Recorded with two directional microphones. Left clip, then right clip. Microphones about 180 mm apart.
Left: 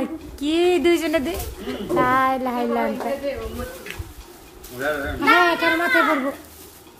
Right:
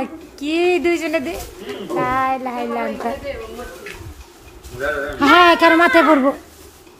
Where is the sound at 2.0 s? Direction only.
5° left (ahead or behind).